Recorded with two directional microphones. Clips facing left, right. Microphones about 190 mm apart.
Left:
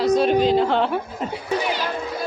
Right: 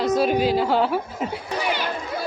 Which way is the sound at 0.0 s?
5° right (ahead or behind).